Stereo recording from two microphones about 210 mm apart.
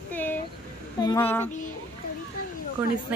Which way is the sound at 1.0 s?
15° left (ahead or behind).